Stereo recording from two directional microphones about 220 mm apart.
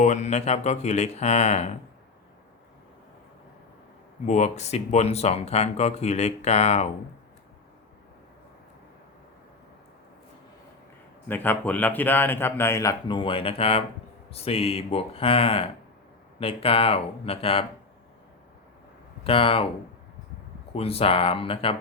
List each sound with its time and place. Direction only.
0.0 s speech: 30° left (ahead or behind)
4.3 s speech: 30° left (ahead or behind)
11.3 s speech: 10° left (ahead or behind); by 17.7 s 25° left (ahead or behind)
19.2 s speech: 25° left (ahead or behind)
20.7 s speech: 25° left (ahead or behind)